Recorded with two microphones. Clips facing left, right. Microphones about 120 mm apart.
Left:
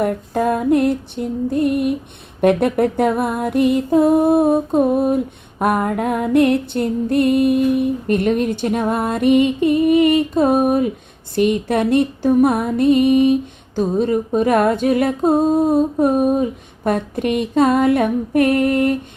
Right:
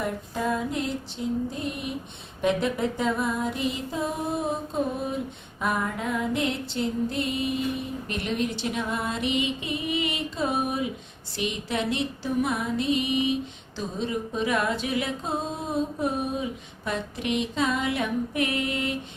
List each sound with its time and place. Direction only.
0.0 s music: 55° left (ahead or behind)